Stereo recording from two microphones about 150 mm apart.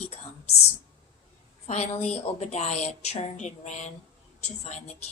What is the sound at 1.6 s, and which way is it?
Speech, 45° left (ahead or behind).